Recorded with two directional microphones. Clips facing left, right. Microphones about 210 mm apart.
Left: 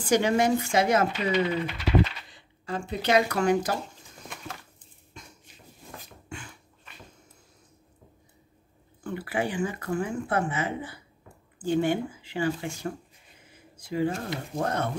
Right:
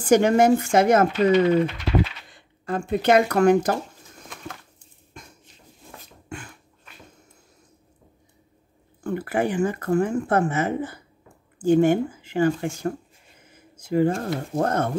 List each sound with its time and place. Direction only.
0.0 s speech: 50° right (ahead or behind)
2.3 s speech: 50° right (ahead or behind)
6.2 s dog: 50° right (ahead or behind)
9.0 s speech: 45° right (ahead or behind)